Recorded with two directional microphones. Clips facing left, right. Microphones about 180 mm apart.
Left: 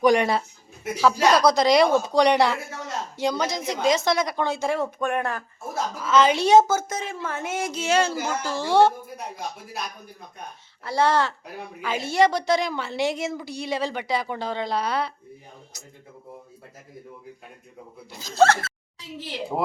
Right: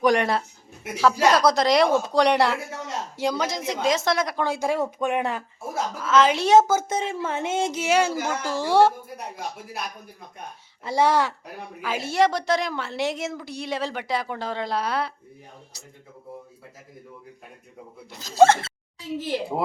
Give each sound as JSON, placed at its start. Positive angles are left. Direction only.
{"t": 0.0, "sound": "a woman's voice", "side_deg": 0}
{"t": 6.0, "sound": "a woman's voice", "side_deg": 0}
{"t": 6.8, "sound": "speech", "side_deg": -30}
{"t": 10.8, "sound": "a woman's voice", "side_deg": -15}
{"t": 18.1, "sound": "a woman's voice", "side_deg": 0}
{"t": 18.3, "sound": "speech", "side_deg": -20}